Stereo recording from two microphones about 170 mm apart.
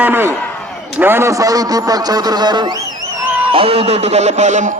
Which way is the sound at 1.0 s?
15° right (ahead or behind).